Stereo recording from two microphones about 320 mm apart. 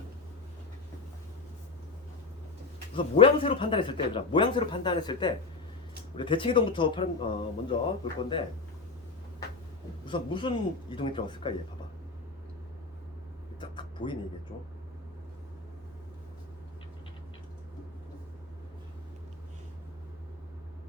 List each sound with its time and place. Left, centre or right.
2.9 s speech: centre
10.1 s speech: centre
13.6 s a sound: centre
14.5 s speech: centre